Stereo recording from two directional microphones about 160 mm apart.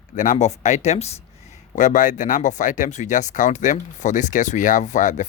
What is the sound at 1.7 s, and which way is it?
Speech, 55° left (ahead or behind).